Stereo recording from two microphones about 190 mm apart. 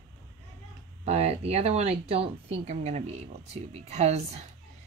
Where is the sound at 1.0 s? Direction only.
35° right (ahead or behind).